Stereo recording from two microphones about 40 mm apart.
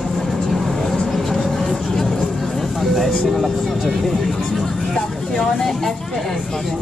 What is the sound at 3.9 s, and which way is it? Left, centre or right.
Speech, centre.